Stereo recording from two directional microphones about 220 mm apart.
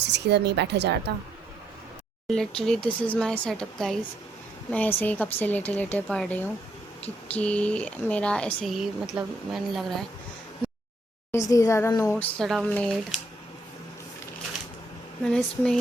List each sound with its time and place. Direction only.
0.0 s a woman's voice: 50° right (ahead or behind)
2.2 s speech: 5° left (ahead or behind)
11.3 s speech: 15° left (ahead or behind)
15.2 s speech: 5° left (ahead or behind)